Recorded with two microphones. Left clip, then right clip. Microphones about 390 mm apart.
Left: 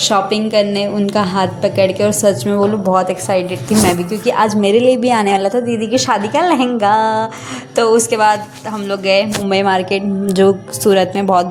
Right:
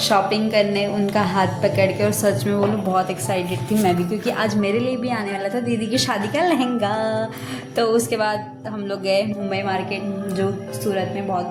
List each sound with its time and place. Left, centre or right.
0.0 s a woman's voice: right
5.9 s a woman's voice: right
9.5 s a woman's voice: right